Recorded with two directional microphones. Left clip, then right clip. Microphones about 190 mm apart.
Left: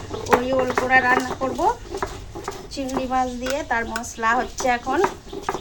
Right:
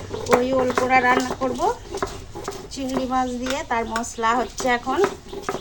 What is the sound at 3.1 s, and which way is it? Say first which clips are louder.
A woman's voice: left 2 dB; 25° left (ahead or behind).